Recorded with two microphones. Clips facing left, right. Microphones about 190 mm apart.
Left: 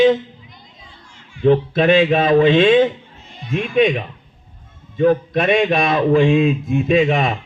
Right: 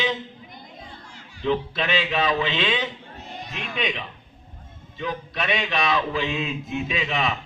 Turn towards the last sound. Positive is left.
turn(degrees=50)  # may be behind; listen again after turning